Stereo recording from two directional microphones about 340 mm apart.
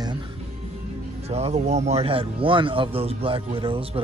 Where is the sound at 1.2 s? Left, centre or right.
Centre.